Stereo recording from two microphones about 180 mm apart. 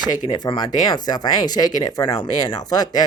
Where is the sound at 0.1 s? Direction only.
25° left (ahead or behind).